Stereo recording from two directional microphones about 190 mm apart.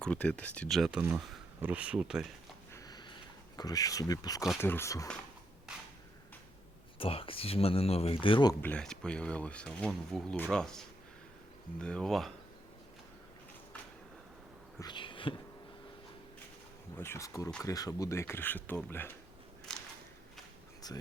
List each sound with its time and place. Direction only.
0.0 s speech: 5° left (ahead or behind)
2.7 s sniff: 20° left (ahead or behind)
3.6 s speech: 20° left (ahead or behind)
7.0 s speech: 30° left (ahead or behind)
8.6 s speech: 5° left (ahead or behind)
14.8 s a sound: 25° left (ahead or behind)
17.0 s speech: 15° left (ahead or behind)
20.8 s speech: 20° left (ahead or behind)